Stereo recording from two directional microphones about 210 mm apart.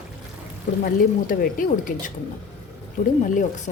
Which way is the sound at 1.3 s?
40° left (ahead or behind).